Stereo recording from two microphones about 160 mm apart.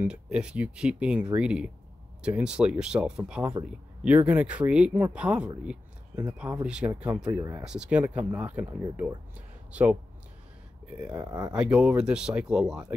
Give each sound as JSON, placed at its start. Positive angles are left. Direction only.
{"t": 0.0, "sound": "speech", "side_deg": -5}
{"t": 7.3, "sound": "speech", "side_deg": -20}
{"t": 7.6, "sound": "speech", "side_deg": -5}
{"t": 11.1, "sound": "speech", "side_deg": -20}
{"t": 11.5, "sound": "speech", "side_deg": -5}